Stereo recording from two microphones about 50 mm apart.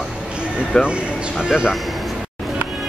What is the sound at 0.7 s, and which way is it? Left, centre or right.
Speech, centre.